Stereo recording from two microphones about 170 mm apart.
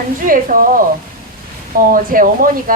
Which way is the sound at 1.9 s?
55° right (ahead or behind).